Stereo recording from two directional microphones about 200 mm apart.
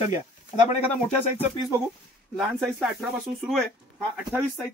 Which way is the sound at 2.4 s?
Centre (ahead or behind).